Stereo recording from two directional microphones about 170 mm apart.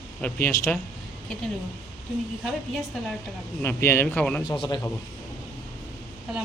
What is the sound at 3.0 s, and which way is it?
Speech, centre (ahead or behind).